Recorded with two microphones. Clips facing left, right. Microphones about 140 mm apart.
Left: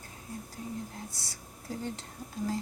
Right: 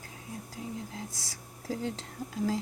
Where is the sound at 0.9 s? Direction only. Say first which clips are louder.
Right 2 dB; 90° right.